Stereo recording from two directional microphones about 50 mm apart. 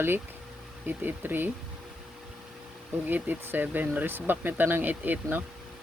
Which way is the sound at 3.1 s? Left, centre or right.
Right.